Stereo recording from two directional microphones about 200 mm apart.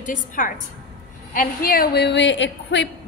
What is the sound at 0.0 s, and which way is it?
A woman's voice, 40° left (ahead or behind).